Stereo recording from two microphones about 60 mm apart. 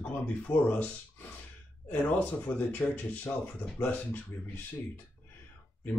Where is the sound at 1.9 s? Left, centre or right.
Left.